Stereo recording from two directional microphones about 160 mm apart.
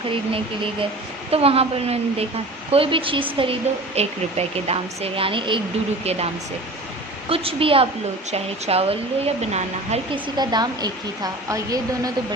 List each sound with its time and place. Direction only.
0.1 s speech: 35° right (ahead or behind)
7.3 s speech: 35° right (ahead or behind)
10.3 s a woman's voice: 25° right (ahead or behind)